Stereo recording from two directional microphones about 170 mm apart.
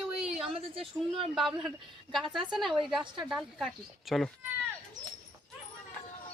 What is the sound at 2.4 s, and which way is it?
Speech, 25° right (ahead or behind).